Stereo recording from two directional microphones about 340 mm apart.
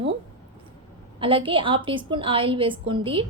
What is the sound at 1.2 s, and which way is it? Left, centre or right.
A woman's voice, centre.